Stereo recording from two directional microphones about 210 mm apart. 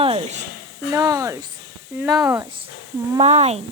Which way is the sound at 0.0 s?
25° right (ahead or behind).